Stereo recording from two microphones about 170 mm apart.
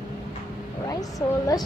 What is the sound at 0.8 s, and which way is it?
Speech, 20° left (ahead or behind).